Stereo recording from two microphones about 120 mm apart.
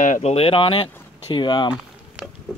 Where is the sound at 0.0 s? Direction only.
75° left (ahead or behind); by 0.8 s 50° left (ahead or behind).